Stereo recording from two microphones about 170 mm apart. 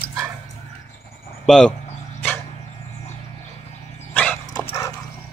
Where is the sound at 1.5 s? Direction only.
5° left (ahead or behind).